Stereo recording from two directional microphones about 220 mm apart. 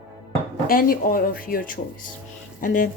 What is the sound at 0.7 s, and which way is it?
A woman's voice, 40° left (ahead or behind).